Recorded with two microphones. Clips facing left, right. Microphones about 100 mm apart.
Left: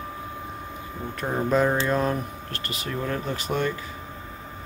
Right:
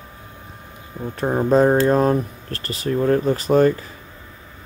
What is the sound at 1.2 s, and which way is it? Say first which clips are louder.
Speech: right 7 dB; 30° right (ahead or behind).